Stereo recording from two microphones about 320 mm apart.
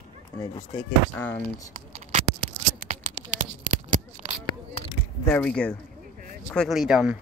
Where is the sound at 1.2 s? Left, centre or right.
Centre.